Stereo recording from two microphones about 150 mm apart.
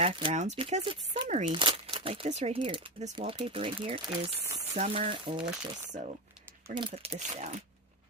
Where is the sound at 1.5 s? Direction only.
35° right (ahead or behind); by 5.1 s 50° right (ahead or behind).